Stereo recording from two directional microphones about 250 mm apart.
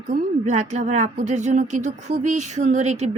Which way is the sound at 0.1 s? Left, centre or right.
Right.